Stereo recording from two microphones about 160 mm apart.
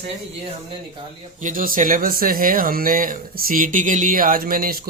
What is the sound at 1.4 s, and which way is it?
Speech, 60° right (ahead or behind).